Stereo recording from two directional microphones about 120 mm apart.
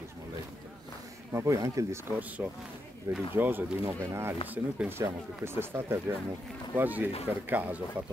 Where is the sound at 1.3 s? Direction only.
25° right (ahead or behind).